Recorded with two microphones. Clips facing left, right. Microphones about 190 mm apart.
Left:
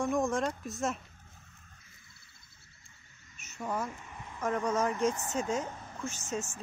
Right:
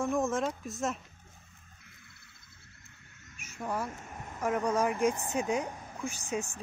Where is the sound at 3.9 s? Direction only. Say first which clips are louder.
Right 3 dB; 50° right (ahead or behind).